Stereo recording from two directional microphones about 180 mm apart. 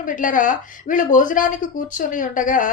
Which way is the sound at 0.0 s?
50° left (ahead or behind).